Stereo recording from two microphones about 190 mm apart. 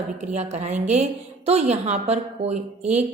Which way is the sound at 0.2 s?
35° right (ahead or behind).